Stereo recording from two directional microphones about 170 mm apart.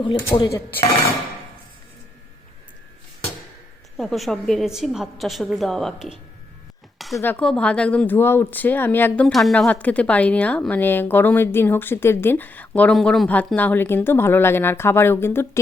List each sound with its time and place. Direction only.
0.0 s speech: 30° left (ahead or behind)
3.9 s a woman's voice: centre (ahead or behind)
7.2 s a woman's voice: 10° left (ahead or behind)
9.2 s a woman's voice: centre (ahead or behind)